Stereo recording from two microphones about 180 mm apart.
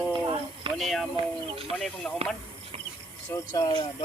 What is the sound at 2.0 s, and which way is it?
Speech, 5° left (ahead or behind).